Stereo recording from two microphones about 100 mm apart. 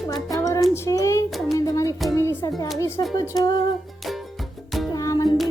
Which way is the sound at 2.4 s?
30° left (ahead or behind).